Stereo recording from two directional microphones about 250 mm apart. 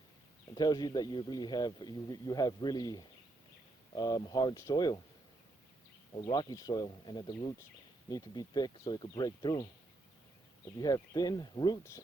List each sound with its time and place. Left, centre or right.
0.5 s speech: centre
6.1 s speech: centre
10.8 s speech: centre